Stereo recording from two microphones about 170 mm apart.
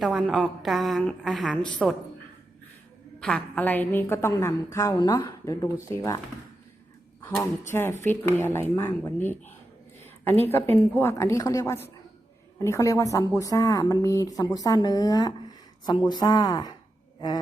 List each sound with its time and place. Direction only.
0.0 s a woman's voice: 5° right (ahead or behind)
3.2 s a woman's voice: 5° left (ahead or behind)
7.2 s a sound: 10° left (ahead or behind)
7.7 s a woman's voice: 15° left (ahead or behind)